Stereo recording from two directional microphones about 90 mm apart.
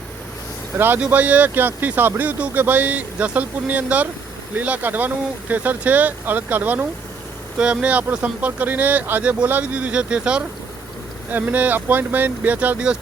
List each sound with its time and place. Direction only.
0.8 s speech: 25° right (ahead or behind)